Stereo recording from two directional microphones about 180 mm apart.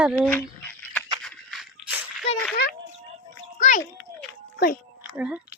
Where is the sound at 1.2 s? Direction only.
Centre (ahead or behind).